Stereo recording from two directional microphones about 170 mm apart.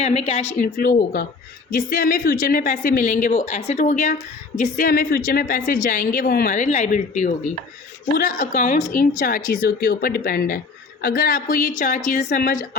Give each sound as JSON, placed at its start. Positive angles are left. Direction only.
{"t": 0.0, "sound": "speech", "side_deg": 35}
{"t": 0.6, "sound": "a woman's voice", "side_deg": 60}